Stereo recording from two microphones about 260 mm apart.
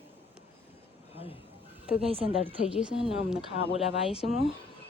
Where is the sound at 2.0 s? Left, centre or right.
Right.